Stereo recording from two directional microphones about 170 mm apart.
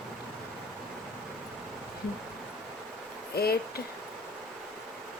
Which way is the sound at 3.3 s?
65° left (ahead or behind).